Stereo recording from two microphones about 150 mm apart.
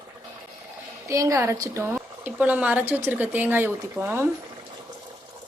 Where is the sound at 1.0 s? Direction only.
20° right (ahead or behind).